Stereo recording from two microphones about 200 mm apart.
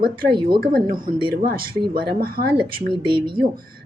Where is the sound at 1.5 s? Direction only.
50° right (ahead or behind).